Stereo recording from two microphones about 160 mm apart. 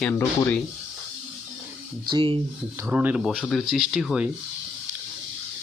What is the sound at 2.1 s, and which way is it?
Speech, 35° right (ahead or behind).